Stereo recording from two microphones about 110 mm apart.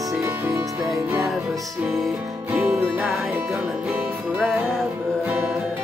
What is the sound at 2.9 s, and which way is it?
Music, centre (ahead or behind).